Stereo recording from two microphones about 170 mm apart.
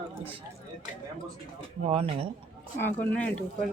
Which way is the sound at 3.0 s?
10° left (ahead or behind).